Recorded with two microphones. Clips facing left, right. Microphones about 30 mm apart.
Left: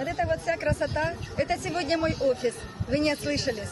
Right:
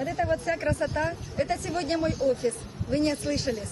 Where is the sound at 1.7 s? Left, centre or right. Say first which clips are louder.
Left 1 dB; centre.